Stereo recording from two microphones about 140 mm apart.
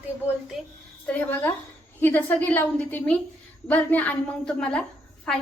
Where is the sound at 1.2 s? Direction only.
15° left (ahead or behind).